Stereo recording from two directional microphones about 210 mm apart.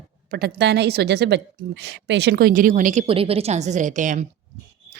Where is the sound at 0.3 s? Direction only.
50° right (ahead or behind).